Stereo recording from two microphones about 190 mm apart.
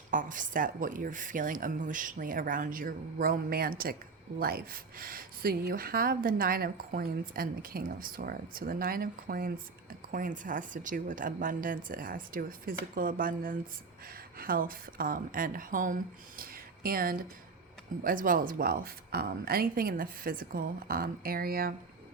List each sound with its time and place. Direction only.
0.1 s speech: 45° right (ahead or behind)
16.4 s a sound: 50° right (ahead or behind)
18.0 s speech: 45° right (ahead or behind)